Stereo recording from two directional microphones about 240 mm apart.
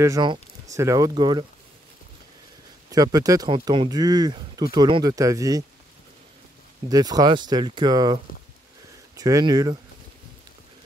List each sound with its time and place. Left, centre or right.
0.0 s speech: centre
2.9 s speech: centre
6.9 s speech: centre